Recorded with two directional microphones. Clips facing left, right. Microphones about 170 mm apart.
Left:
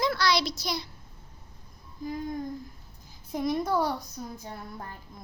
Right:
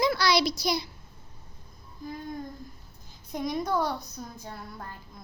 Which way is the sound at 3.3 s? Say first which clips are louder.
Left 2 dB; 5° left (ahead or behind).